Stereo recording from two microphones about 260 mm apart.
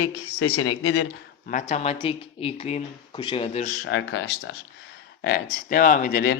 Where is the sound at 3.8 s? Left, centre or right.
Left.